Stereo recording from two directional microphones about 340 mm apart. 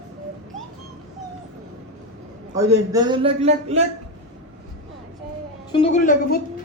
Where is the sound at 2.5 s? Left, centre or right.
Centre.